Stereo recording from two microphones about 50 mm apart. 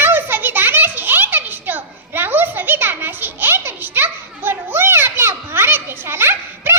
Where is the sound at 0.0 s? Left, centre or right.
Right.